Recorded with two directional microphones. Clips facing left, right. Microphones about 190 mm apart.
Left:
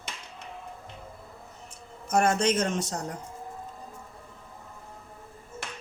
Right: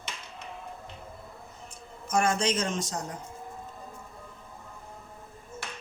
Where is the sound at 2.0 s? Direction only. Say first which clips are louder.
Left 3 dB; 55° left (ahead or behind).